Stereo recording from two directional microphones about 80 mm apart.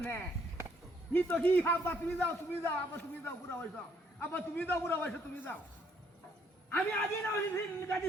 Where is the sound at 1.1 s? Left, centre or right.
Left.